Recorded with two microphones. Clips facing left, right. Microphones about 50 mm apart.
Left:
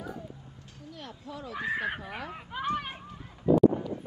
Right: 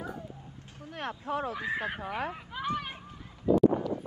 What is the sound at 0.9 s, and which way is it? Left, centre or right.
Speech, right.